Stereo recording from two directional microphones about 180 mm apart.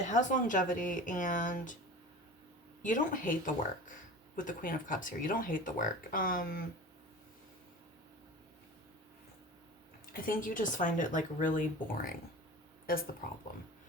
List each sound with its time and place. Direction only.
0.1 s speech: 45° left (ahead or behind)
2.8 s speech: 45° left (ahead or behind)
10.1 s speech: 50° left (ahead or behind)
12.8 s a sound: 55° left (ahead or behind)